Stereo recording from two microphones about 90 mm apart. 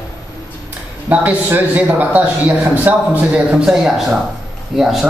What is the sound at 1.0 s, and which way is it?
A man's voice, 20° right (ahead or behind).